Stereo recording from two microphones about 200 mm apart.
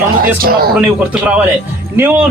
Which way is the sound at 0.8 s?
5° right (ahead or behind).